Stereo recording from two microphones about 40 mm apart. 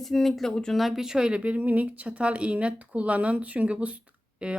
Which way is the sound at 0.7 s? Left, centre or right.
Centre.